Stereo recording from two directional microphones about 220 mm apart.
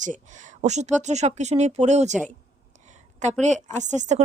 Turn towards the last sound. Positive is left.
turn(degrees=-30)  # may be behind; listen again after turning